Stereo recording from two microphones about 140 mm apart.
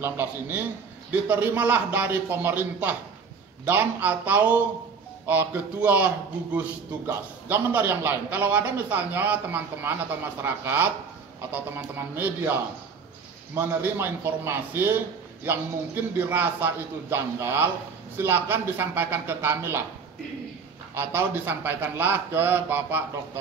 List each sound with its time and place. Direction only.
0.0 s a man's voice: 15° right (ahead or behind)
13.6 s a man's voice: 15° right (ahead or behind)
20.9 s a man's voice: 15° right (ahead or behind)